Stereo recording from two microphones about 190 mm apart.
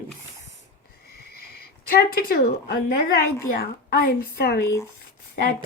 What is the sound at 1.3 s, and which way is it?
Speech, 55° left (ahead or behind).